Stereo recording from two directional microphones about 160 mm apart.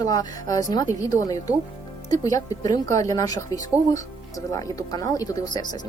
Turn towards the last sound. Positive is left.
turn(degrees=25)  # may be behind; listen again after turning